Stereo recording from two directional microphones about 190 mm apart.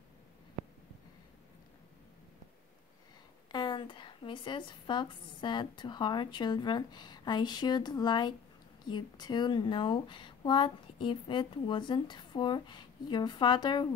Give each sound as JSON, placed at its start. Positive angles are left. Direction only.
{"t": 3.5, "sound": "a woman's voice", "side_deg": 25}